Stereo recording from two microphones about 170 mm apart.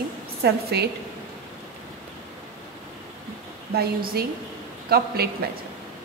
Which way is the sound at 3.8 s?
60° right (ahead or behind).